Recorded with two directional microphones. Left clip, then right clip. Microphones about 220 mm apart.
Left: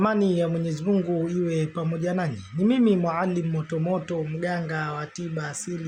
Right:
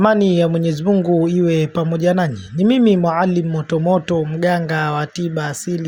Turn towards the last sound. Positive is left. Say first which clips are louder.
# right 10 dB
turn(degrees=-35)  # may be behind; listen again after turning